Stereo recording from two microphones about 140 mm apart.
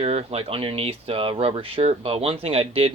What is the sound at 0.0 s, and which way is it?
Speech, 45° right (ahead or behind).